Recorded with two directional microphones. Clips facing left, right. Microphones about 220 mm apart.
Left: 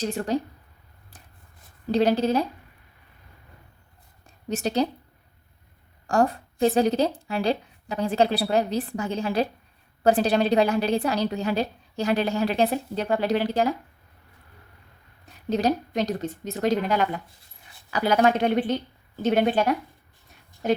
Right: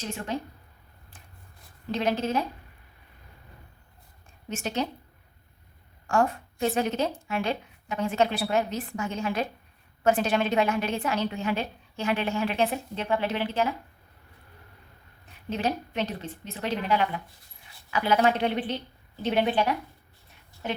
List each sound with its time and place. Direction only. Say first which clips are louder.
0.0 s a woman's voice: left 7 dB; 35° left (ahead or behind)
1.9 s a woman's voice: left 6 dB; 35° left (ahead or behind)
4.4 s a woman's voice: left 6 dB; 35° left (ahead or behind)
6.1 s a woman's voice: left 3 dB; 35° left (ahead or behind)
15.4 s a woman's voice: left 6 dB; 40° left (ahead or behind)